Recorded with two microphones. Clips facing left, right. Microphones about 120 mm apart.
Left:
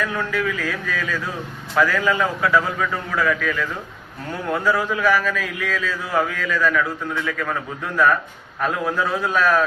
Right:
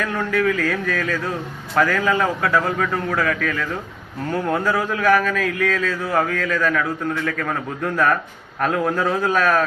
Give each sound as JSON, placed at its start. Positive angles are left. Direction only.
{"t": 0.0, "sound": "speech", "side_deg": -50}
{"t": 4.9, "sound": "speech", "side_deg": -50}